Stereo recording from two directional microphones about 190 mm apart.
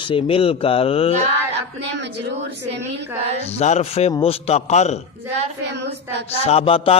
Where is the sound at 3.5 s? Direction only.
35° left (ahead or behind).